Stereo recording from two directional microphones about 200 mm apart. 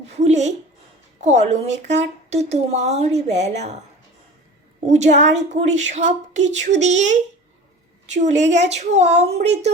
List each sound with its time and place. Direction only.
0.1 s a sound: 35° right (ahead or behind)
1.2 s a woman's voice: 35° right (ahead or behind)
4.9 s a woman's voice: 35° right (ahead or behind)